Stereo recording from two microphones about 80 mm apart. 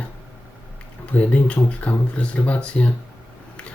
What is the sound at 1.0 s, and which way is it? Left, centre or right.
Speech, centre.